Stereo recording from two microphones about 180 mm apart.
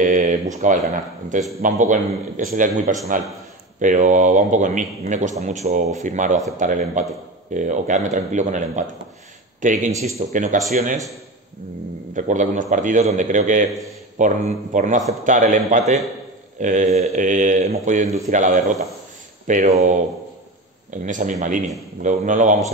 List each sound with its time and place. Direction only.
0.0 s a sound: 45° right (ahead or behind)
0.6 s speech: 45° right (ahead or behind)
12.2 s speech: 45° right (ahead or behind)